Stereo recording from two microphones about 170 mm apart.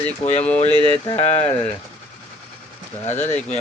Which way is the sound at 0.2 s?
40° left (ahead or behind).